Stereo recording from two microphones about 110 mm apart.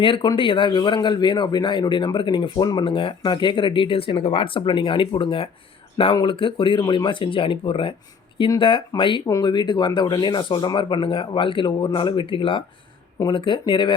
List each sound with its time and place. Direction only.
0.0 s speech: 50° left (ahead or behind)
9.2 s speech: 35° left (ahead or behind)